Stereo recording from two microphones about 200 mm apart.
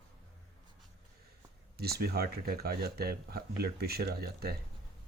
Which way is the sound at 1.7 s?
50° right (ahead or behind).